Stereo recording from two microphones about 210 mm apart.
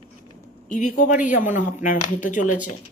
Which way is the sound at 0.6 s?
35° left (ahead or behind).